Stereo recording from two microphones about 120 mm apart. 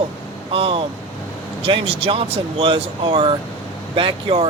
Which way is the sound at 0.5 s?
50° right (ahead or behind).